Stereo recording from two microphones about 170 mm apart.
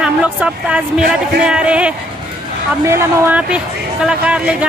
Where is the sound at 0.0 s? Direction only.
5° right (ahead or behind).